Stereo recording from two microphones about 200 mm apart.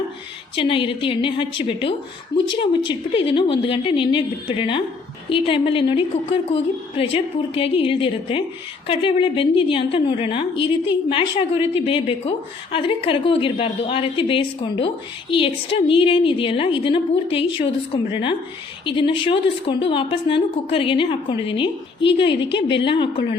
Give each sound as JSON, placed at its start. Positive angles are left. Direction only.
{"t": 0.5, "sound": "a woman's voice", "side_deg": 25}